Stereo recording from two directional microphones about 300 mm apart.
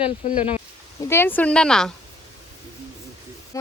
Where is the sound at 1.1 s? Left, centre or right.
Centre.